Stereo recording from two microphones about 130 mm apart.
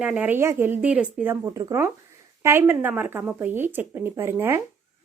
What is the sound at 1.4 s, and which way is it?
A woman's voice, 20° right (ahead or behind).